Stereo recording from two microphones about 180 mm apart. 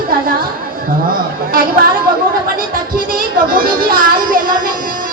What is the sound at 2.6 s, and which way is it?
Speech, 55° right (ahead or behind).